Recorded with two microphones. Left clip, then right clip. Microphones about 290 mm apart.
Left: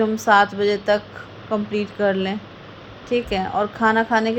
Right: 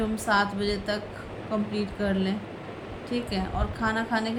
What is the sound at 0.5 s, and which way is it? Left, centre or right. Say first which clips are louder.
A woman's voice: left 10 dB; centre.